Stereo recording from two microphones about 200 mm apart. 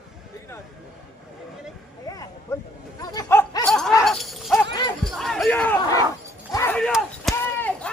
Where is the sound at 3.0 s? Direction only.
20° left (ahead or behind); by 3.9 s centre (ahead or behind).